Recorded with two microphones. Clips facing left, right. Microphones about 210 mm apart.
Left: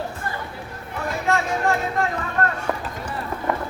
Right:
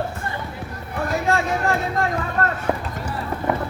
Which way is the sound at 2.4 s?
35° right (ahead or behind).